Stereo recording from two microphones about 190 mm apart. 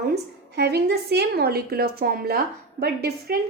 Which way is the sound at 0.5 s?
60° right (ahead or behind).